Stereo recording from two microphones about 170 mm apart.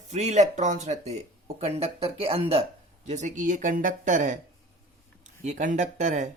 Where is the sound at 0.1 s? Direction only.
45° right (ahead or behind).